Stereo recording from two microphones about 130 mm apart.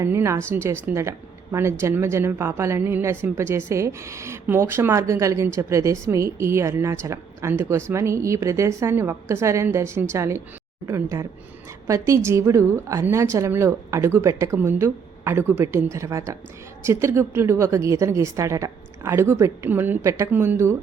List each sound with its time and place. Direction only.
0.0 s a woman's voice: 20° right (ahead or behind)